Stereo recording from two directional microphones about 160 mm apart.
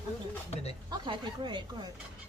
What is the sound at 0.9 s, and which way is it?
Speech, 30° right (ahead or behind).